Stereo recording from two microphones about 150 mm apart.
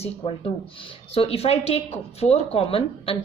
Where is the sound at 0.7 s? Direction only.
40° left (ahead or behind).